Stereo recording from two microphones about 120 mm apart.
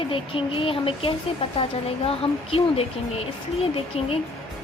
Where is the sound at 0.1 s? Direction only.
50° left (ahead or behind).